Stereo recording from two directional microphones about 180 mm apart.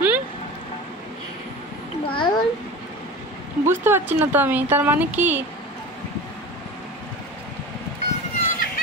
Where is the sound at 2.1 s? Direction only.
25° left (ahead or behind).